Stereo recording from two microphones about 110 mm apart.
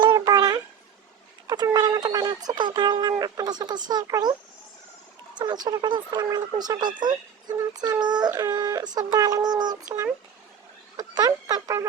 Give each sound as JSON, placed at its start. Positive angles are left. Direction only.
{"t": 0.0, "sound": "a sound", "side_deg": -40}
{"t": 1.5, "sound": "speech", "side_deg": -35}
{"t": 5.4, "sound": "speech", "side_deg": -40}
{"t": 10.9, "sound": "speech", "side_deg": -35}